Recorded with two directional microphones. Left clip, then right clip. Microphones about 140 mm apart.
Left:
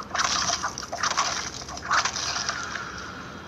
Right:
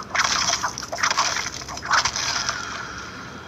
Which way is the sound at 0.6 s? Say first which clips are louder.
Right 4 dB; 30° right (ahead or behind).